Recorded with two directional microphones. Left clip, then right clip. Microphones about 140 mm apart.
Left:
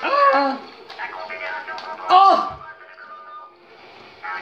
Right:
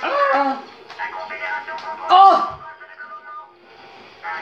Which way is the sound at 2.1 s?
30° left (ahead or behind).